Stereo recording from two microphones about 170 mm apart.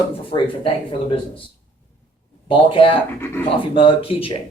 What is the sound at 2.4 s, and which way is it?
Speech, 30° left (ahead or behind).